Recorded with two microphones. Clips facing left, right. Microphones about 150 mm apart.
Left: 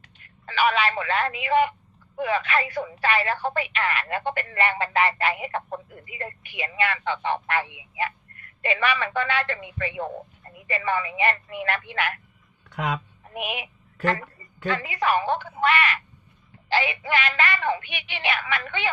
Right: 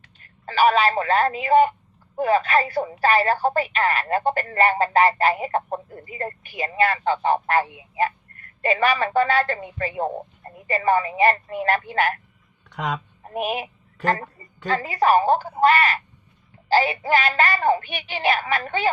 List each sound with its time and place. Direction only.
0.2 s speech: 40° right (ahead or behind)
12.7 s speech: 5° left (ahead or behind)
13.2 s a woman's voice: 40° right (ahead or behind)